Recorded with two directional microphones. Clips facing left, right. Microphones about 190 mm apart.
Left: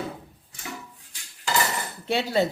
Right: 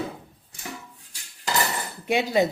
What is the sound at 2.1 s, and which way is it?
Speech, 15° right (ahead or behind).